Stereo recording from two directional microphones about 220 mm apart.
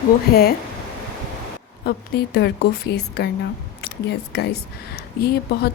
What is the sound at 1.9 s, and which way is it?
Speech, 45° left (ahead or behind).